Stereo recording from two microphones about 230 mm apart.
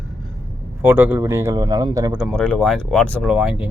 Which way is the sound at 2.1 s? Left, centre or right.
Centre.